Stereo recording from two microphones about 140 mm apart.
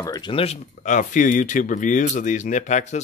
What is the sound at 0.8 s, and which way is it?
Speech, 60° left (ahead or behind).